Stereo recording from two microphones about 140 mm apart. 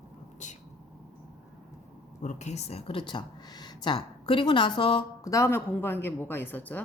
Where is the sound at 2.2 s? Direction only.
55° left (ahead or behind); by 5.0 s 40° left (ahead or behind).